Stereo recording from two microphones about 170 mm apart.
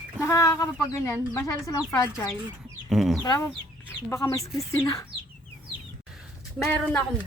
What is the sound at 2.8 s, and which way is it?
Speech, centre (ahead or behind).